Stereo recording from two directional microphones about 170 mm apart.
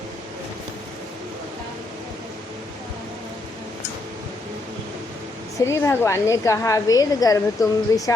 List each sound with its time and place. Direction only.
5.5 s a woman's voice: 15° left (ahead or behind)